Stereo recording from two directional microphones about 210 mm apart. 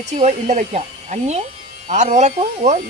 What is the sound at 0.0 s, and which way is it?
Speech, 30° right (ahead or behind).